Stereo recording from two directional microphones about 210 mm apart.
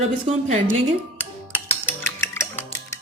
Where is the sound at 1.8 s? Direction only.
10° left (ahead or behind).